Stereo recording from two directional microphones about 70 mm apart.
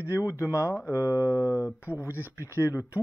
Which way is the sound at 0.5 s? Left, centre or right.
Left.